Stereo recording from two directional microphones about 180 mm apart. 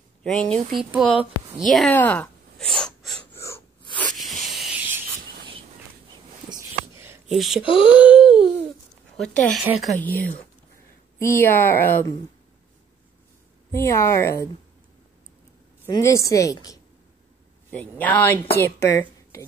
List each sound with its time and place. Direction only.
0.2 s speech: 5° left (ahead or behind)
0.7 s speech: 10° right (ahead or behind)
3.3 s wheeze: 15° left (ahead or behind)
4.1 s spray: centre (ahead or behind)
7.2 s speech: centre (ahead or behind)
7.6 s speech: 30° left (ahead or behind)
7.9 s a sound: 10° right (ahead or behind)
8.2 s speech: 30° left (ahead or behind)
9.2 s speech: 5° left (ahead or behind)
11.1 s speech: 15° left (ahead or behind)
13.7 s speech: 15° left (ahead or behind)
15.9 s speech: 15° left (ahead or behind)